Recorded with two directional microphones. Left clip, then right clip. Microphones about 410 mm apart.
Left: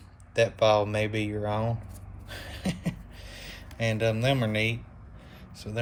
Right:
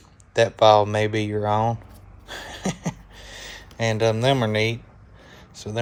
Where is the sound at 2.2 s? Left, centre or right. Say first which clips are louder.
Right 6 dB; centre.